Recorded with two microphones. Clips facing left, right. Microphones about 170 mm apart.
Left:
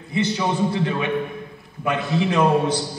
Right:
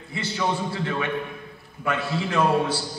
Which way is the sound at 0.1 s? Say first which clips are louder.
Left 4 dB; 20° left (ahead or behind).